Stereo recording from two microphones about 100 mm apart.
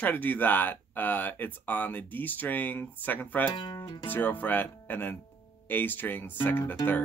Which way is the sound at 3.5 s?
45° left (ahead or behind).